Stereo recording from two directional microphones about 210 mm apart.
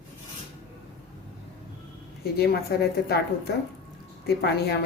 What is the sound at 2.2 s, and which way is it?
A woman's voice, 50° left (ahead or behind).